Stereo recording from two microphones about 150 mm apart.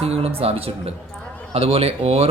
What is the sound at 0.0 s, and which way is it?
Speech, 40° right (ahead or behind).